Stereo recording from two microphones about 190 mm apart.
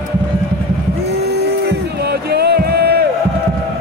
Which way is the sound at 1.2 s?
60° right (ahead or behind).